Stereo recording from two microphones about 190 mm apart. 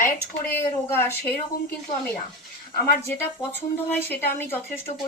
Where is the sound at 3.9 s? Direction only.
10° left (ahead or behind).